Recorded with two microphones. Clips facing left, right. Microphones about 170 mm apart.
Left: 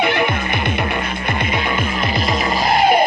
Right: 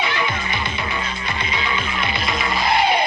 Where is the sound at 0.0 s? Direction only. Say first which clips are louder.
Left 6 dB; 55° left (ahead or behind).